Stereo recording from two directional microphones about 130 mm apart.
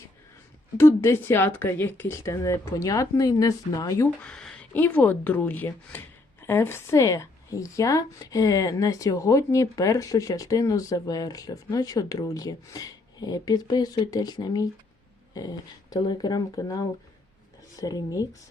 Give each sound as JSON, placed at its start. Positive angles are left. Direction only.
{"t": 0.8, "sound": "a woman's voice", "side_deg": 20}
{"t": 4.2, "sound": "a woman's voice", "side_deg": 5}